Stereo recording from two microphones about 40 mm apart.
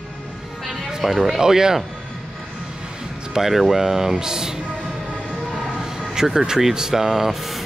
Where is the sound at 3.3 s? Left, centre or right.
Centre.